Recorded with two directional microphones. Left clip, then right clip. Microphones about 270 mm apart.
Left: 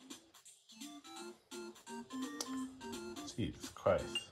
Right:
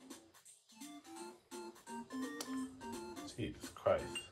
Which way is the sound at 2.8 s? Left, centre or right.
Centre.